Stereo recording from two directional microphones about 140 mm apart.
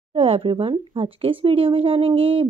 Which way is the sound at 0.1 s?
45° right (ahead or behind).